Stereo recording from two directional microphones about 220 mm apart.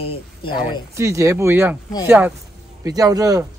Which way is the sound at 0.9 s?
15° right (ahead or behind).